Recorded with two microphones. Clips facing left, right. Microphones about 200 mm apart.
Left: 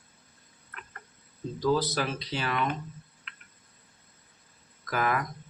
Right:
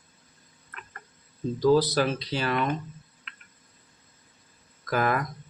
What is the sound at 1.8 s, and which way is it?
Speech, 35° right (ahead or behind).